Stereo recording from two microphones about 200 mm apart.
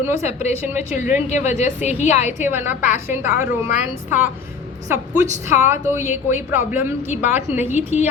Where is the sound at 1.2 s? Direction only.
35° left (ahead or behind).